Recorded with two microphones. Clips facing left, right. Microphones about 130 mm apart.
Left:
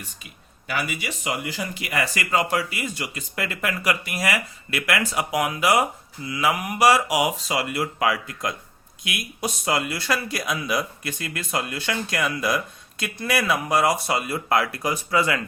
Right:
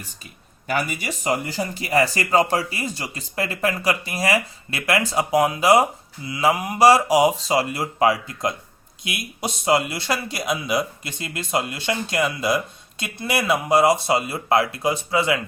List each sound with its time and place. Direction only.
0.7 s speech: 45° right (ahead or behind); by 15.4 s 25° right (ahead or behind)